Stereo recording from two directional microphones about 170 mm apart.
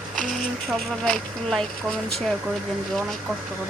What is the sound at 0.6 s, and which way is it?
Speech, centre (ahead or behind).